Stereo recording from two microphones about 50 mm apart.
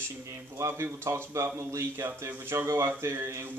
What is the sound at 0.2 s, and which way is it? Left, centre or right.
Speech, right.